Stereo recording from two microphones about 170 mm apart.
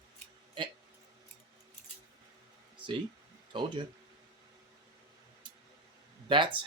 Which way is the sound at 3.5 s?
30° right (ahead or behind).